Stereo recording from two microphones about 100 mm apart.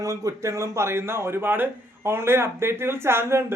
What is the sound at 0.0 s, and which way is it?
Speech, 35° right (ahead or behind).